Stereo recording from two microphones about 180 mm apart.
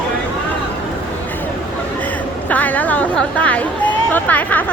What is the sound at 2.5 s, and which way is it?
Chatter, 10° left (ahead or behind).